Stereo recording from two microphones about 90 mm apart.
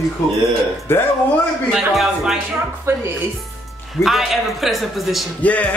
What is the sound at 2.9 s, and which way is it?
Speech, 30° right (ahead or behind).